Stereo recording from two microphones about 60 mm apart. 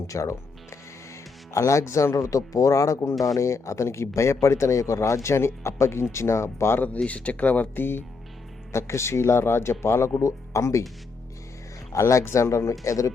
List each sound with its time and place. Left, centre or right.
0.1 s speech: left
3.2 s speech: left
6.7 s speech: left
8.7 s speech: left
11.9 s speech: left
12.8 s speech: left